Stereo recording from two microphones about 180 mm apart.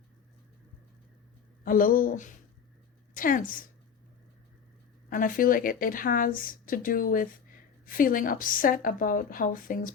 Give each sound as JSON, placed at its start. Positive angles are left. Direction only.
{"t": 1.6, "sound": "a woman's voice", "side_deg": 50}
{"t": 5.0, "sound": "a woman's voice", "side_deg": 50}